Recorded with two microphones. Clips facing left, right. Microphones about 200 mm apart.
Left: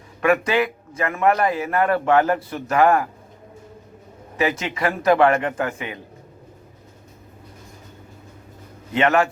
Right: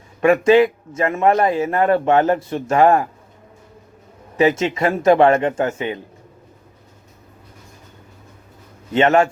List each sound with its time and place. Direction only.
0.2 s a man's voice: 25° right (ahead or behind)
4.6 s a man's voice: 25° right (ahead or behind)
8.9 s a man's voice: 25° right (ahead or behind)